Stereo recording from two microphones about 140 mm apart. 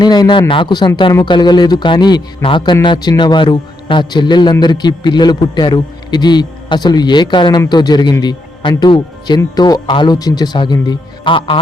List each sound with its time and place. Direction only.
0.0 s a man's voice: 30° left (ahead or behind)